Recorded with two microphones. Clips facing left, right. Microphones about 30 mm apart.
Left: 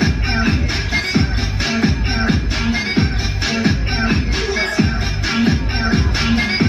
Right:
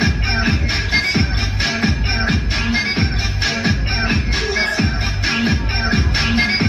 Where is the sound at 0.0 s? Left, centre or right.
Right.